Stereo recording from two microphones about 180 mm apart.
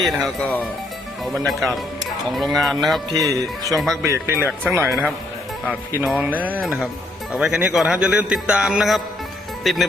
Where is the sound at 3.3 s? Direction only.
20° right (ahead or behind).